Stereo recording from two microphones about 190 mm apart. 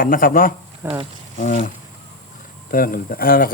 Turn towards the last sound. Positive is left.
turn(degrees=50)  # may be behind; listen again after turning